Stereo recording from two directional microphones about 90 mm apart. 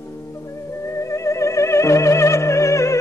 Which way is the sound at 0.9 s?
35° left (ahead or behind).